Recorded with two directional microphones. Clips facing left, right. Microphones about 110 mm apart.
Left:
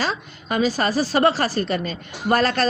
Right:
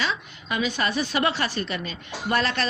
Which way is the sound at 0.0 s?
40° left (ahead or behind).